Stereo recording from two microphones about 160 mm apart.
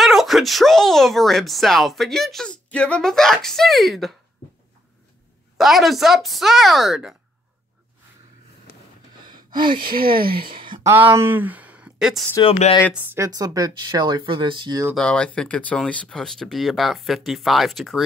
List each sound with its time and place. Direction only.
0.0 s speech: centre (ahead or behind)
5.6 s speech: centre (ahead or behind)
9.2 s gasp: 25° right (ahead or behind)
9.8 s speech: 65° right (ahead or behind)
10.6 s a sound: 30° right (ahead or behind)
10.9 s speech: 15° right (ahead or behind)
12.4 s speech: 40° left (ahead or behind)
13.0 s speech: 15° right (ahead or behind)
15.0 s speech: 5° left (ahead or behind)